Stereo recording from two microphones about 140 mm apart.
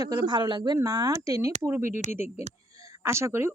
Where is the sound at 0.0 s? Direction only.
25° right (ahead or behind).